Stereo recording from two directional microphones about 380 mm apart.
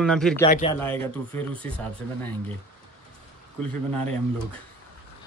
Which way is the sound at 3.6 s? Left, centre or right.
Centre.